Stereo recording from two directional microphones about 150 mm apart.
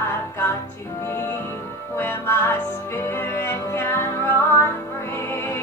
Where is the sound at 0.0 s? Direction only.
15° left (ahead or behind).